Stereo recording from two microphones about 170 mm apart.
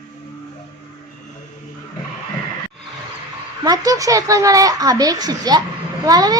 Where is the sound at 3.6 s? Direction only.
20° right (ahead or behind).